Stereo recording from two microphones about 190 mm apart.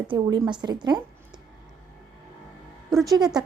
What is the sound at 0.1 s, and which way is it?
Speech, 25° right (ahead or behind).